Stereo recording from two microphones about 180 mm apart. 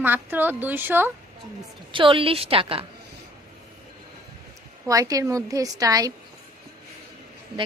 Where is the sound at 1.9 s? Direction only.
30° right (ahead or behind).